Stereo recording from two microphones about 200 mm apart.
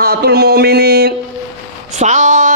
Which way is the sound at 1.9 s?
35° right (ahead or behind).